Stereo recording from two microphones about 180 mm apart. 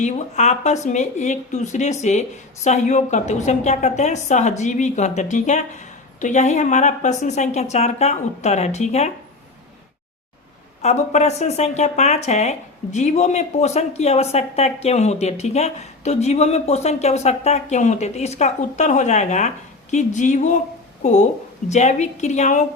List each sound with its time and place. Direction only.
0.0 s speech: 40° left (ahead or behind)
10.8 s speech: 35° left (ahead or behind)